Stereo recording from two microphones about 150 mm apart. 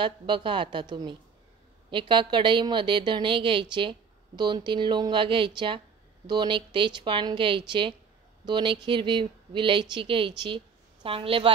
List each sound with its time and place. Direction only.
0.0 s speech: 35° right (ahead or behind)